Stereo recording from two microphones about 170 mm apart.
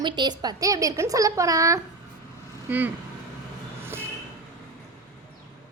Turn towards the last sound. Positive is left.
turn(degrees=-15)  # may be behind; listen again after turning